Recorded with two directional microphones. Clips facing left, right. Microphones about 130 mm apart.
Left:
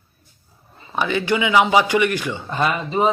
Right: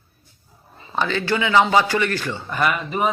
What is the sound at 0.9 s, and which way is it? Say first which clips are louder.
A man's voice: left 2 dB; 15° left (ahead or behind).